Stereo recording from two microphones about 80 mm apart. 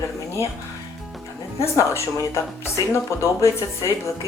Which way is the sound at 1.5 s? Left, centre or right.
Left.